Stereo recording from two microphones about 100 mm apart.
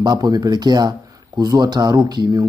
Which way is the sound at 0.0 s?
40° right (ahead or behind).